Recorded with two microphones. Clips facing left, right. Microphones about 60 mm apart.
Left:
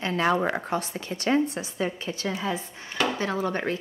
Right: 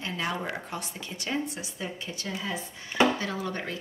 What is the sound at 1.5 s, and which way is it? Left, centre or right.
Speech, left.